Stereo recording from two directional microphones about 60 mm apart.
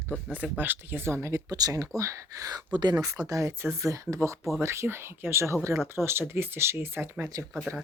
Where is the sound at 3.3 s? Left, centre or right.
Right.